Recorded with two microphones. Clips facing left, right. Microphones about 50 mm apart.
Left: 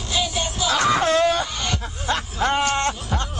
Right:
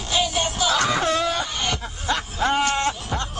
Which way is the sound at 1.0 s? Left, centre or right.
Left.